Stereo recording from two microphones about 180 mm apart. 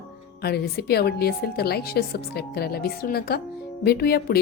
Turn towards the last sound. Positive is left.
turn(degrees=60)  # may be behind; listen again after turning